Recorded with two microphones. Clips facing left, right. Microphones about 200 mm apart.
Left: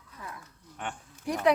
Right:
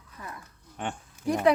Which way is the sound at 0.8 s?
25° right (ahead or behind).